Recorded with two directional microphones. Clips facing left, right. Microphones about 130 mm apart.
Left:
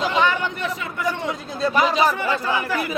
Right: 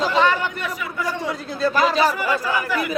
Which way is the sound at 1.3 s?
20° left (ahead or behind).